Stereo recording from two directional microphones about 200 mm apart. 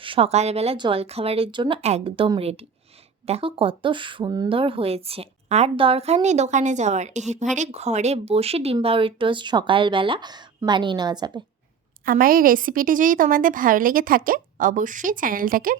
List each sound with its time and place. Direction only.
0.0 s speech: 25° right (ahead or behind)
12.0 s a woman's voice: 45° right (ahead or behind)